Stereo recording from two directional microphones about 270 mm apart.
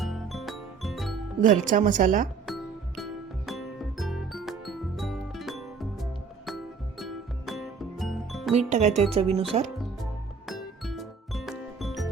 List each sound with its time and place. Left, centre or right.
0.0 s music: centre
1.4 s speech: right
2.5 s music: centre
8.5 s speech: right
9.7 s music: centre